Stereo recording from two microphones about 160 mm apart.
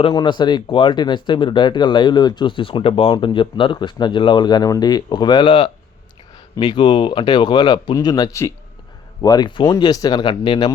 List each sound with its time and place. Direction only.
0.0 s speech: 30° left (ahead or behind)